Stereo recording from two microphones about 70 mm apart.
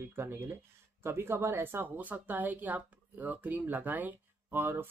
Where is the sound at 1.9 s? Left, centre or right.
Right.